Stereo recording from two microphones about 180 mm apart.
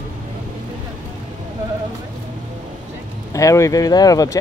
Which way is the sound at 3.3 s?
15° left (ahead or behind).